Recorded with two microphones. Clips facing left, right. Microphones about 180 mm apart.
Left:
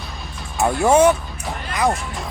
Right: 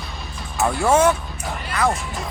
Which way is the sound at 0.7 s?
15° left (ahead or behind).